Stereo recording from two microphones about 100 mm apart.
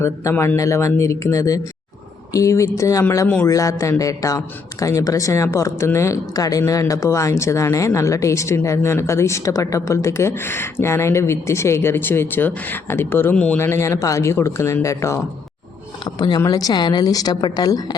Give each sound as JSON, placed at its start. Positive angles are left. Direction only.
{"t": 0.0, "sound": "a man's voice", "side_deg": 25}
{"t": 13.6, "sound": "speech", "side_deg": 25}
{"t": 16.0, "sound": "a man's voice", "side_deg": 45}